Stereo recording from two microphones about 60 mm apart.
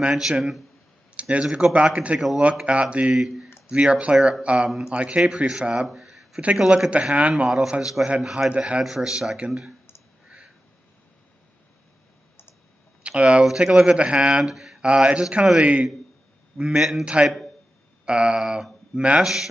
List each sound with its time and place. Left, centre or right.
0.0 s speech: centre
1.1 s speech: centre
2.1 s speech: centre
2.6 s speech: centre
3.2 s speech: centre
3.6 s speech: centre
5.9 s a sound: centre
6.6 s speech: centre
6.9 s speech: centre
7.4 s speech: centre
13.0 s speech: centre
14.4 s speech: centre
14.8 s speech: centre